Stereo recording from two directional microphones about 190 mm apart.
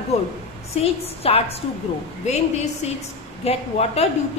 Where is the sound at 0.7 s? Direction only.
30° left (ahead or behind).